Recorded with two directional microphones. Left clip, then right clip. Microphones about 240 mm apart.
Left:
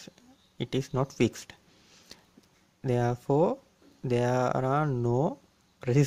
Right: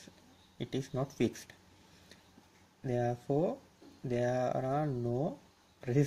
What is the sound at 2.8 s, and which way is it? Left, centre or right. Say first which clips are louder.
Speech: left 6 dB; left.